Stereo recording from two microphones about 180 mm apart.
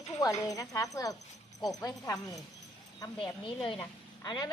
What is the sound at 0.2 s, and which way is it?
A woman's voice, 20° left (ahead or behind).